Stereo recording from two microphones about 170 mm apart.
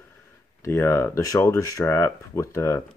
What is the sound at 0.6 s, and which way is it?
Speech, 15° left (ahead or behind).